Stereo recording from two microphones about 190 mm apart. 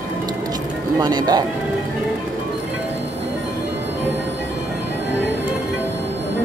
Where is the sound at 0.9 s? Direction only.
20° right (ahead or behind).